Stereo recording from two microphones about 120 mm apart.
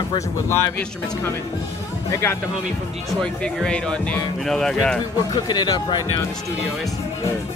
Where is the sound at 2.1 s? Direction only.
25° left (ahead or behind).